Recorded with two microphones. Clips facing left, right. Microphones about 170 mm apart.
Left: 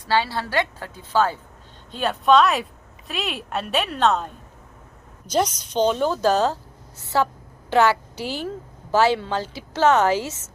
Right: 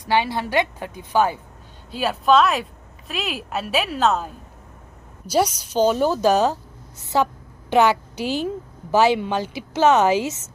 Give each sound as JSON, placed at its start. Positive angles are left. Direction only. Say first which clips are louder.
{"t": 0.0, "sound": "a woman's voice", "louder": "right 1 dB", "side_deg": -15}